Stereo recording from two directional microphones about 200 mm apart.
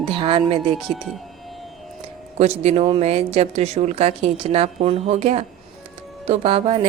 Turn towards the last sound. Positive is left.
turn(degrees=-30)  # may be behind; listen again after turning